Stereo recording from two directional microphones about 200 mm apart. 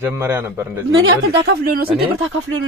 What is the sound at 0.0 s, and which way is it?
Speech, 10° right (ahead or behind).